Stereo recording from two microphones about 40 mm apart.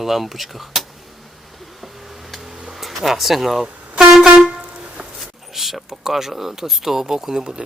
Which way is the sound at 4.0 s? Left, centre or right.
Centre.